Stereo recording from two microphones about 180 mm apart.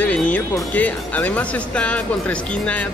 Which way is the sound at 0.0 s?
5° left (ahead or behind).